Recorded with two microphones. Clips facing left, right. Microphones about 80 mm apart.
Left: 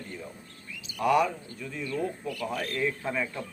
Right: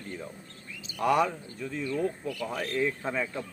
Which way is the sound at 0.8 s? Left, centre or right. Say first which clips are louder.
Left 1 dB; right.